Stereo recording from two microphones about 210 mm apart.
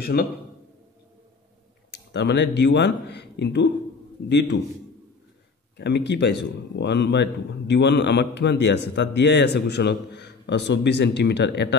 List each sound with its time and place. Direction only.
0.0 s a man's voice: 45° left (ahead or behind)
1.9 s a man's voice: 55° left (ahead or behind)
5.8 s a man's voice: 55° left (ahead or behind)